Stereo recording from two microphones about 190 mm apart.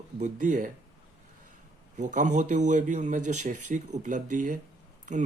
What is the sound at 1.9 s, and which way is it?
Speech, 40° right (ahead or behind).